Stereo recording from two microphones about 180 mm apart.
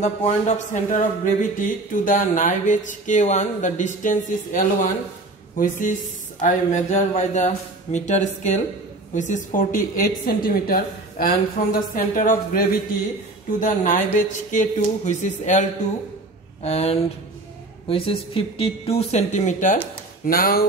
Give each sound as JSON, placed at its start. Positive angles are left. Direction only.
{"t": 0.0, "sound": "speech", "side_deg": 40}
{"t": 16.6, "sound": "speech", "side_deg": 35}
{"t": 20.2, "sound": "speech", "side_deg": 55}